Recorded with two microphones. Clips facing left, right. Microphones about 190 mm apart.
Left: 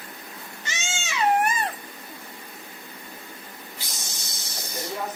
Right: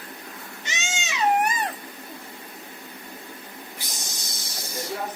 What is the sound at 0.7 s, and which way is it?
Baby cry, 20° right (ahead or behind).